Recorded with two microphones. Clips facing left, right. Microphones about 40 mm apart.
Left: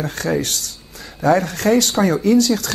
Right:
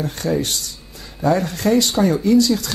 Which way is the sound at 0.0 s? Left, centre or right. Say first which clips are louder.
Even; left.